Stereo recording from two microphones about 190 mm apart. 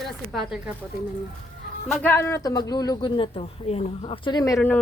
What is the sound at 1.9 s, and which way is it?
A woman's voice, 10° left (ahead or behind).